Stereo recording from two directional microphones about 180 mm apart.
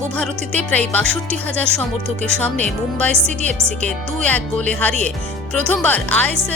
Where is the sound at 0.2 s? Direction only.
5° left (ahead or behind).